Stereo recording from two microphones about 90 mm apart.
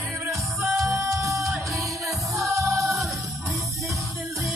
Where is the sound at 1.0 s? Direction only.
35° right (ahead or behind).